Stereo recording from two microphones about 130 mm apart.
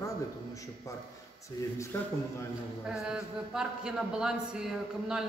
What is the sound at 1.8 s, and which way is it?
Speech, 15° left (ahead or behind).